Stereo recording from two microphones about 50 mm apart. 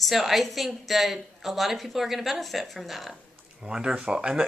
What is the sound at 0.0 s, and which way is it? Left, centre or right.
A woman's voice, centre.